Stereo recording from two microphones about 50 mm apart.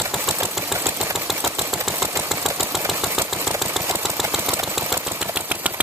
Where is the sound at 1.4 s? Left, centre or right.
Right.